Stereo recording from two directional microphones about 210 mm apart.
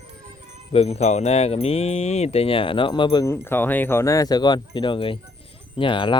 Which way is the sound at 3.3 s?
10° left (ahead or behind).